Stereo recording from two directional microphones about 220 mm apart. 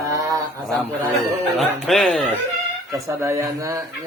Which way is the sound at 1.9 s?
5° left (ahead or behind).